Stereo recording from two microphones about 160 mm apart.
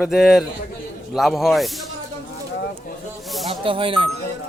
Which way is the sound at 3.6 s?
35° right (ahead or behind).